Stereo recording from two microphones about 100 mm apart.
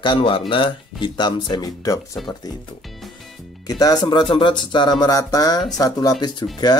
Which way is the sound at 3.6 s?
40° left (ahead or behind).